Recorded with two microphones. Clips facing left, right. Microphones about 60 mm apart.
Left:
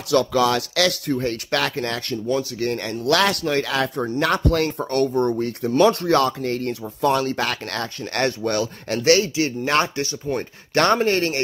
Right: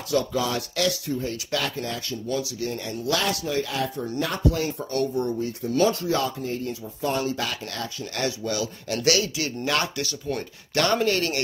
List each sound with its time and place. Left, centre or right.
0.1 s speech: left